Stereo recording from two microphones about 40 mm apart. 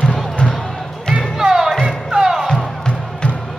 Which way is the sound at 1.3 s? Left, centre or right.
Centre.